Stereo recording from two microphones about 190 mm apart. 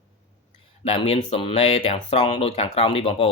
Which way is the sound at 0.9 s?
30° left (ahead or behind).